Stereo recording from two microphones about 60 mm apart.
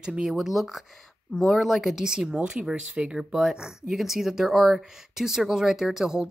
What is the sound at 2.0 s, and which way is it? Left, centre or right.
Speech, centre.